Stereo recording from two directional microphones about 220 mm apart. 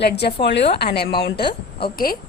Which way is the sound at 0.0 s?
45° left (ahead or behind).